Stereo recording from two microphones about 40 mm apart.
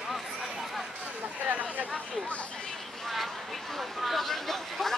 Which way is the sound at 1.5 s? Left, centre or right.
Right.